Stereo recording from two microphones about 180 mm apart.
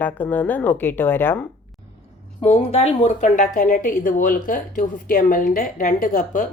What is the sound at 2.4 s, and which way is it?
A woman's voice, 35° left (ahead or behind).